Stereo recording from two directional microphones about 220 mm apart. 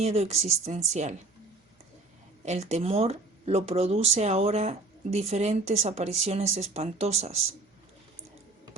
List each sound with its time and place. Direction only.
0.0 s speech: 30° right (ahead or behind)
2.4 s speech: 30° right (ahead or behind)